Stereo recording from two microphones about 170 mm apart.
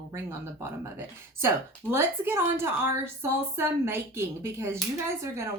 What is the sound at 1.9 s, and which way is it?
A woman's voice, 15° right (ahead or behind).